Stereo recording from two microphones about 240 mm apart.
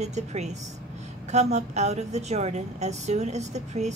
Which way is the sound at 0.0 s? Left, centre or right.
Right.